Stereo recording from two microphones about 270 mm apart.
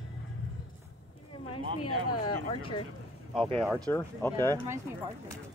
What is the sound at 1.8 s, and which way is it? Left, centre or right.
Speech, left.